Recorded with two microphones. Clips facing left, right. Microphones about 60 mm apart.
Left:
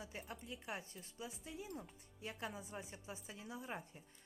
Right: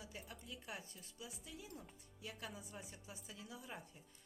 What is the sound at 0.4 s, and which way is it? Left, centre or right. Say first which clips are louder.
A woman's voice: left 3 dB; left.